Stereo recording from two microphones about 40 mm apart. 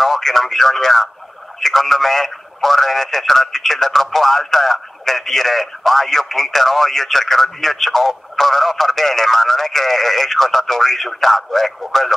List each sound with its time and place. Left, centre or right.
0.0 s speech: centre